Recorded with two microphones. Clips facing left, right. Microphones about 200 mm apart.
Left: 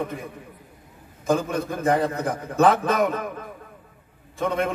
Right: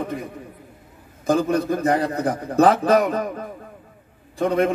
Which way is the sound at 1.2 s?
35° right (ahead or behind).